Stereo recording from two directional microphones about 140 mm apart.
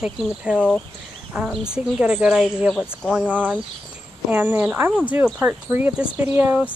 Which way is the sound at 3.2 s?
10° right (ahead or behind).